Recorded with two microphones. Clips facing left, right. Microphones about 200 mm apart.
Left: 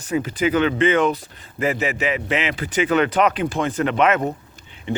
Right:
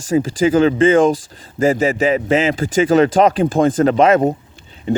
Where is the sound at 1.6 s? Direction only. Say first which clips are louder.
Right 7 dB; 45° right (ahead or behind).